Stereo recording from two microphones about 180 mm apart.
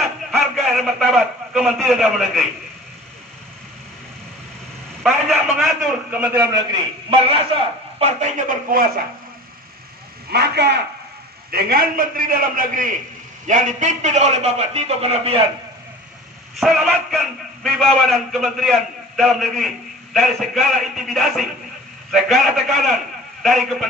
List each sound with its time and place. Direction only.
0.3 s a man's voice: centre (ahead or behind)
5.0 s a man's voice: centre (ahead or behind)
6.1 s a man's voice: 10° right (ahead or behind)
8.0 s a man's voice: 45° right (ahead or behind)
10.3 s a man's voice: 65° right (ahead or behind); by 15.4 s 35° right (ahead or behind)
16.5 s a man's voice: centre (ahead or behind)